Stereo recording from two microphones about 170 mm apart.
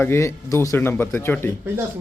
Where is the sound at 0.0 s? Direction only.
15° left (ahead or behind).